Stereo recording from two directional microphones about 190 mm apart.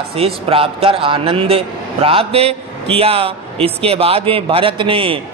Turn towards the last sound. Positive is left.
turn(degrees=-25)  # may be behind; listen again after turning